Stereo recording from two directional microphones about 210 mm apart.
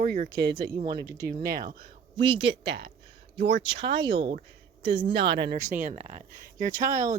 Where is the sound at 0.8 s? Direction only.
20° right (ahead or behind).